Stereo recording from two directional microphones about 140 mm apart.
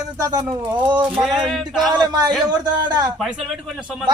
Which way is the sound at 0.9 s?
10° right (ahead or behind).